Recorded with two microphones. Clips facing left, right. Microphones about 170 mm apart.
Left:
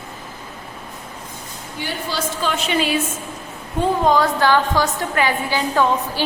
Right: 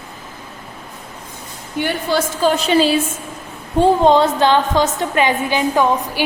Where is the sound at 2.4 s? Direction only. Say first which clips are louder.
Right 7 dB; 35° right (ahead or behind).